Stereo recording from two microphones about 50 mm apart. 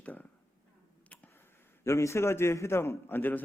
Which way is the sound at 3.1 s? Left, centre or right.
Left.